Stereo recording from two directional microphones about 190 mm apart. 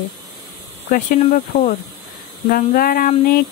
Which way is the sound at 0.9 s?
40° left (ahead or behind).